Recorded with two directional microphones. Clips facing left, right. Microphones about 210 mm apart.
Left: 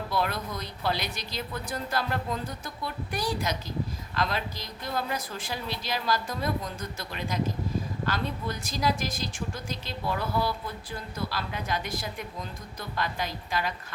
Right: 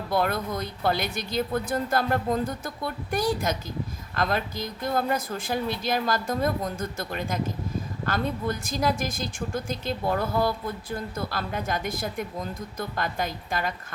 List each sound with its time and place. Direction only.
0.1 s speech: 50° right (ahead or behind)